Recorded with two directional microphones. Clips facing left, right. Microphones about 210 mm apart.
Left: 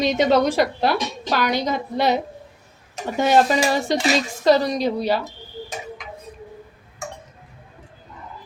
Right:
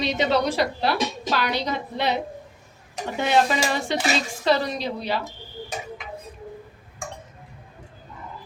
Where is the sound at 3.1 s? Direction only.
40° left (ahead or behind).